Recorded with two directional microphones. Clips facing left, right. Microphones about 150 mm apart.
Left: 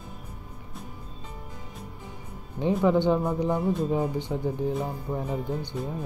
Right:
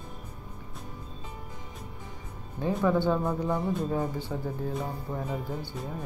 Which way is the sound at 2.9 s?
20° left (ahead or behind).